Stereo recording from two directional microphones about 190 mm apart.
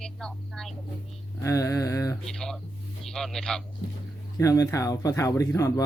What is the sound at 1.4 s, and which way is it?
Speech, 15° left (ahead or behind).